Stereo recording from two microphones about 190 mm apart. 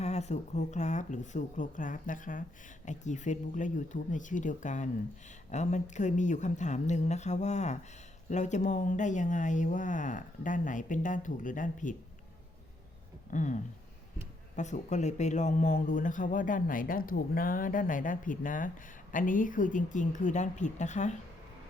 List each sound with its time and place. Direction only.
0.0 s speech: 35° left (ahead or behind)
13.3 s a man's voice: 40° left (ahead or behind)